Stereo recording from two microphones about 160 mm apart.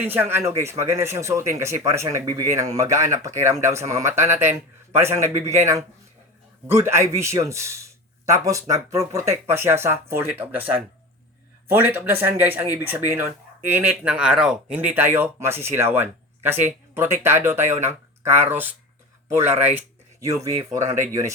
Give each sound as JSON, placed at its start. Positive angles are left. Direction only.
{"t": 0.0, "sound": "speech", "side_deg": -10}
{"t": 6.7, "sound": "speech", "side_deg": -15}
{"t": 11.7, "sound": "speech", "side_deg": -15}